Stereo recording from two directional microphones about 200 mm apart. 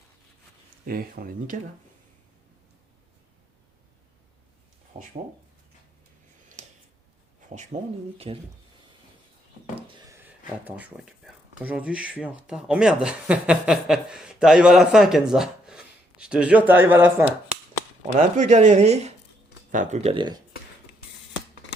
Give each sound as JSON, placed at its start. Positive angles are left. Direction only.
{"t": 0.9, "sound": "speech", "side_deg": -50}
{"t": 4.9, "sound": "speech", "side_deg": -45}
{"t": 6.6, "sound": "a sound", "side_deg": -35}
{"t": 7.7, "sound": "speech", "side_deg": -45}
{"t": 8.3, "sound": "speech", "side_deg": -25}
{"t": 10.1, "sound": "speech", "side_deg": -10}
{"t": 18.2, "sound": "speech", "side_deg": -35}